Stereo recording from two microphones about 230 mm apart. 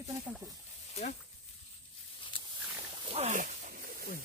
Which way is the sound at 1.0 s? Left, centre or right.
Left.